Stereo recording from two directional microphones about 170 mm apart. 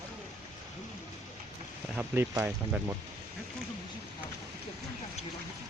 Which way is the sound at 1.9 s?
15° right (ahead or behind).